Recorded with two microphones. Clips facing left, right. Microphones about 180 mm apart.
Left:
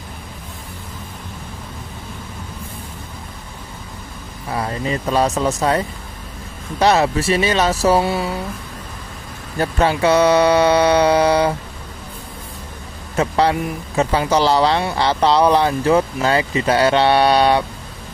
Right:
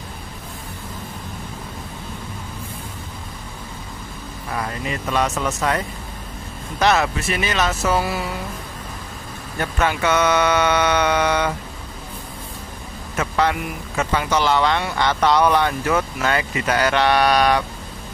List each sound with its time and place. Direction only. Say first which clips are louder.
4.6 s speech: left 5 dB; 30° left (ahead or behind)
9.6 s speech: left 5 dB; 35° left (ahead or behind)
13.1 s speech: left 4 dB; 30° left (ahead or behind)